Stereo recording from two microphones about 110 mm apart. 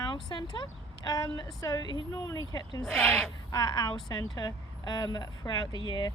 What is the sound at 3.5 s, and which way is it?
Speech, 35° left (ahead or behind).